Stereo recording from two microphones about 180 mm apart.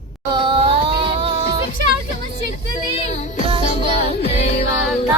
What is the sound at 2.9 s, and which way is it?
Music, 35° left (ahead or behind).